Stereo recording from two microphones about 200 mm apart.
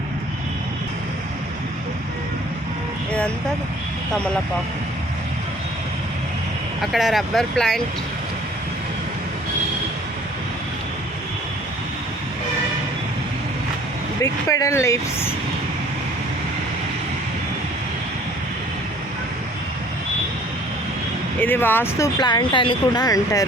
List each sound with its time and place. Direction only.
3.1 s vehicle: 5° left (ahead or behind)
6.9 s speech: centre (ahead or behind)
14.2 s speech: 15° left (ahead or behind)
21.4 s speech: 10° left (ahead or behind)